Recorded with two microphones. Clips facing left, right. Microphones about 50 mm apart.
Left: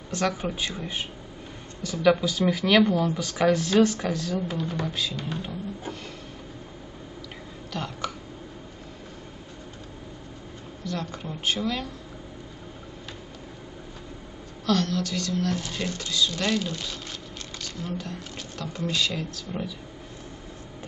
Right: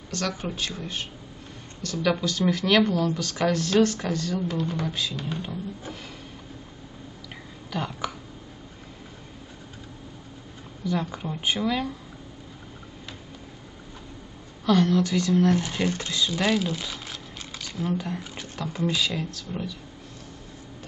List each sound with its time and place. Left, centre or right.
0.1 s speech: centre
4.8 s music: centre
7.7 s speech: centre
10.9 s speech: centre
14.7 s speech: centre
16.3 s a sound: centre
17.9 s speech: centre